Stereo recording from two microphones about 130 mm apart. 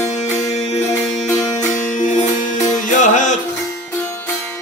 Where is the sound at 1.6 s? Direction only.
70° left (ahead or behind).